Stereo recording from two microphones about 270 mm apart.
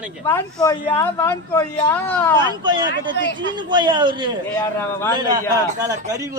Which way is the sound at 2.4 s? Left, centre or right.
Centre.